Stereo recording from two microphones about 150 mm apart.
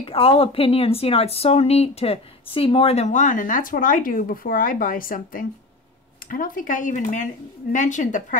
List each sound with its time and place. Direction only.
0.0 s a woman's voice: 40° left (ahead or behind); by 8.4 s 55° left (ahead or behind)